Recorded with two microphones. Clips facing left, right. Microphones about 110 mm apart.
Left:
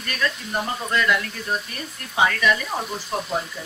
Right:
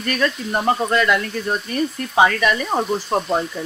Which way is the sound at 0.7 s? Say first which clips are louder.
Right 11 dB; 80° right.